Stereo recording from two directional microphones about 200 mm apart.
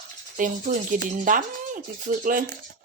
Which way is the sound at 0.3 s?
40° right (ahead or behind).